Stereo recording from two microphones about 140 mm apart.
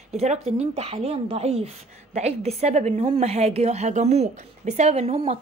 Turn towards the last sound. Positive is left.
turn(degrees=-45)  # may be behind; listen again after turning